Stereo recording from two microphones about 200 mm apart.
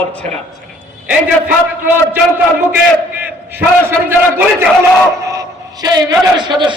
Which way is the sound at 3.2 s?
10° right (ahead or behind).